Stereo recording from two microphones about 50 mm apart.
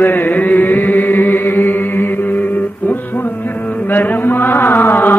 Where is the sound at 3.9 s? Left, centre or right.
Left.